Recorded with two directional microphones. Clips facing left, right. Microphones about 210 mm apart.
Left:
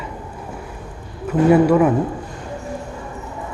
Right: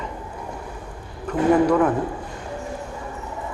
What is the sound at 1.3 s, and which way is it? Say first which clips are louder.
Speech: left 4 dB; 10° left (ahead or behind).